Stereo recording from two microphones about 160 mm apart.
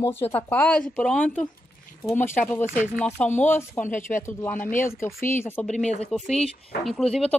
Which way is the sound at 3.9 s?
55° left (ahead or behind).